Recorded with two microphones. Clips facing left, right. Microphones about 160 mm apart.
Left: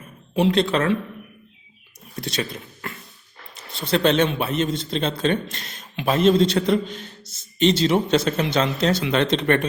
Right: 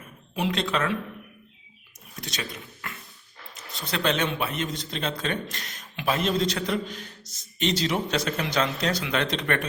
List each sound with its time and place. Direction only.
0.3 s speech: 30° left (ahead or behind)
2.1 s a man's voice: 30° left (ahead or behind)